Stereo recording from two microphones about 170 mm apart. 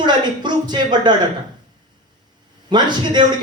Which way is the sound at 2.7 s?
25° right (ahead or behind).